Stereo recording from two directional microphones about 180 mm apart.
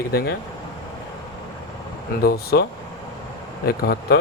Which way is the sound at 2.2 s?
60° left (ahead or behind).